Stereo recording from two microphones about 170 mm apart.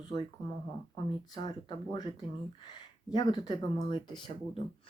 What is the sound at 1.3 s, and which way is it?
Speech, 25° left (ahead or behind).